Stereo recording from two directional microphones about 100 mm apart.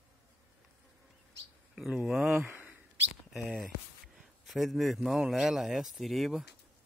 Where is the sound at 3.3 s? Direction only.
Centre (ahead or behind).